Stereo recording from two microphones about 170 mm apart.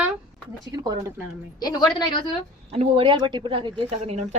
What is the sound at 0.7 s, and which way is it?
Speech, 25° right (ahead or behind).